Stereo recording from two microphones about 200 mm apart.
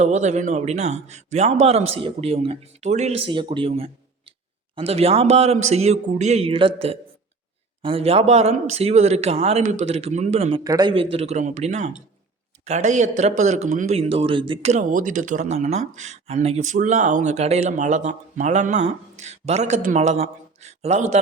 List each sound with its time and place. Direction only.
0.0 s speech: 35° right (ahead or behind)
10.6 s speech: 20° right (ahead or behind); by 21.2 s 35° right (ahead or behind)